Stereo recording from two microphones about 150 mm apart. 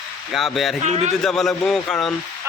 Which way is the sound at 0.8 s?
50° right (ahead or behind).